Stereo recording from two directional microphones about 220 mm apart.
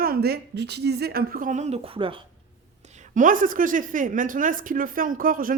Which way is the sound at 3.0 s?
35° right (ahead or behind).